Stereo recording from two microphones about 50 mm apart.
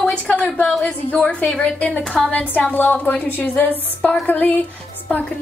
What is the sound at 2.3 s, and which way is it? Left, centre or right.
A woman's voice, left.